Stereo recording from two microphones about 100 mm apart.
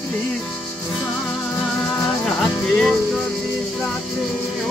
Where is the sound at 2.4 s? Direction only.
5° left (ahead or behind).